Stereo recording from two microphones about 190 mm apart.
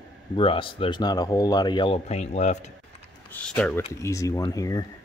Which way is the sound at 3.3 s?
10° left (ahead or behind).